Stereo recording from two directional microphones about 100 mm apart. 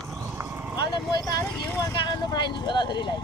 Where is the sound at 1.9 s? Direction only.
45° left (ahead or behind).